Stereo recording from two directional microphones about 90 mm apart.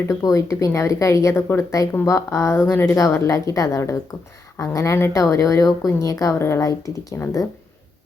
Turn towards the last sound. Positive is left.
turn(degrees=35)  # may be behind; listen again after turning